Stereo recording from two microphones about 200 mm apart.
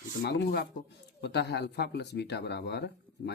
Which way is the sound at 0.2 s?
55° left (ahead or behind).